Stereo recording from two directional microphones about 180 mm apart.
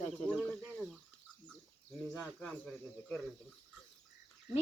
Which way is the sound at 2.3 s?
5° left (ahead or behind).